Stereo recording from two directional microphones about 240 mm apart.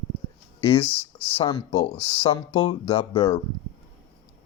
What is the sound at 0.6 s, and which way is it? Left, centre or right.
Speech, left.